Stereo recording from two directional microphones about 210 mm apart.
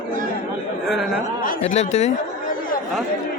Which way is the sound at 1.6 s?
30° left (ahead or behind).